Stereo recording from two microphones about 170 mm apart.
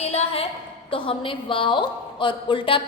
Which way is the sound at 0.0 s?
40° left (ahead or behind).